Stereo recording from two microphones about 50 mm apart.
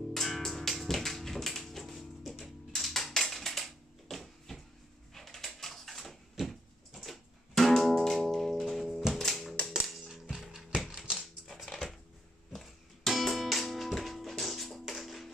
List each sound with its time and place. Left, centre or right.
0.1 s music: centre
5.1 s a sound: centre
9.3 s music: centre
10.3 s mechanisms: centre
11.4 s dog: centre
12.5 s music: centre